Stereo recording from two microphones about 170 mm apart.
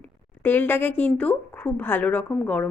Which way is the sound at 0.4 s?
10° left (ahead or behind).